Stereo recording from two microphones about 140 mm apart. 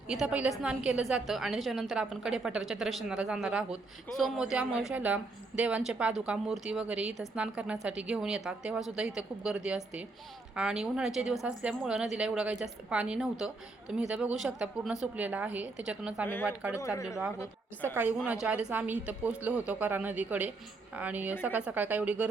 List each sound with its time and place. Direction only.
0.1 s a woman's voice: 5° right (ahead or behind)
16.2 s a woman's voice: 15° left (ahead or behind)
18.3 s a woman's voice: 10° right (ahead or behind)